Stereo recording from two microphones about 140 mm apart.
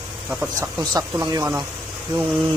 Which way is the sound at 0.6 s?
25° right (ahead or behind).